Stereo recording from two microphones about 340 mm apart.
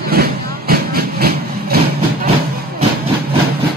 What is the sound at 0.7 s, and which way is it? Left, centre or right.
Train, right.